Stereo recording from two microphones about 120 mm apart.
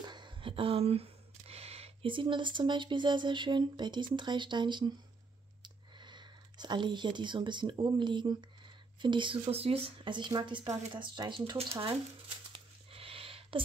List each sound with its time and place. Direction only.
0.0 s speech: 40° right (ahead or behind)
9.5 s speech: 55° right (ahead or behind)
11.5 s speech: 55° right (ahead or behind)
12.5 s a sound: 50° right (ahead or behind)